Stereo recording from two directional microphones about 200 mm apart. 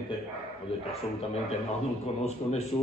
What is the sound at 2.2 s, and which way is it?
Speech, 30° left (ahead or behind).